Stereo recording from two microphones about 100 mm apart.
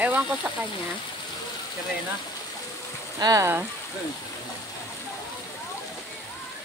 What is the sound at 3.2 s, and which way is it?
Speech, 35° right (ahead or behind).